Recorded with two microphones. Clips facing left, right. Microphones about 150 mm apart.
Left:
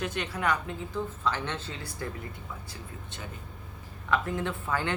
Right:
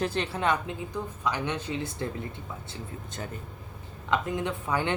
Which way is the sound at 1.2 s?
15° right (ahead or behind).